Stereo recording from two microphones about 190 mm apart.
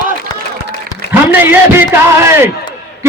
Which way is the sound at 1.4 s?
10° right (ahead or behind).